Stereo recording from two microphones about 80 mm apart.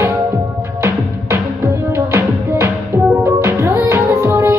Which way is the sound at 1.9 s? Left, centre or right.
Right.